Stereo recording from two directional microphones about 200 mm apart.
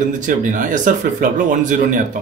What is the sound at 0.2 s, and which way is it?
Speech, 40° right (ahead or behind).